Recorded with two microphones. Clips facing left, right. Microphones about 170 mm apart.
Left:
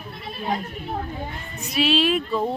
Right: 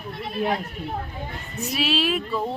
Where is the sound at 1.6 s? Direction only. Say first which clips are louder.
Left 3 dB; centre (ahead or behind).